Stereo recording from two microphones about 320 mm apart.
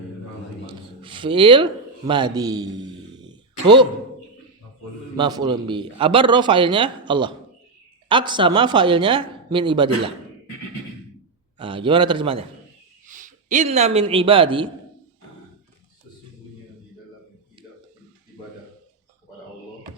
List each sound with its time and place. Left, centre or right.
0.7 s a sound: centre
5.1 s a man's voice: centre
11.5 s a man's voice: centre